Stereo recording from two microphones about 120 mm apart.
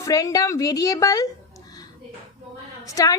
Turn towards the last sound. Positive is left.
turn(degrees=30)  # may be behind; listen again after turning